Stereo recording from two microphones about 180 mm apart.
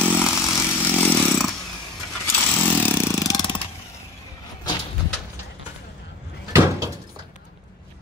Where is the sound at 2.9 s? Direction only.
15° left (ahead or behind).